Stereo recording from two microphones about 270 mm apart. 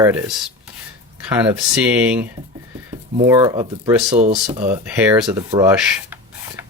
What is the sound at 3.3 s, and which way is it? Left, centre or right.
Speech, centre.